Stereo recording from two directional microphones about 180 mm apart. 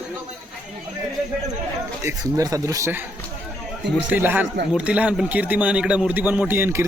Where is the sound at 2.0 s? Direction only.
20° right (ahead or behind).